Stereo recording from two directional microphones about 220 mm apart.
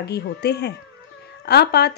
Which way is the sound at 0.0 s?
50° left (ahead or behind).